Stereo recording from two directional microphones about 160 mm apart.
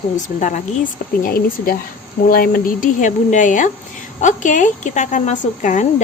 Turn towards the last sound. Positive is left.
turn(degrees=50)  # may be behind; listen again after turning